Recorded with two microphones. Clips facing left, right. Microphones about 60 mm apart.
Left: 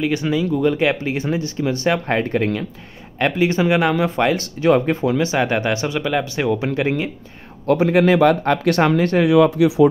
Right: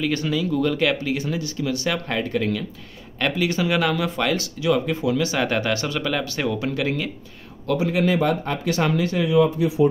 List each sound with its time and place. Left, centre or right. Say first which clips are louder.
0.0 s speech: left 4 dB; centre
4.6 s speech: left 7 dB; left
7.6 s speech: left 6 dB; left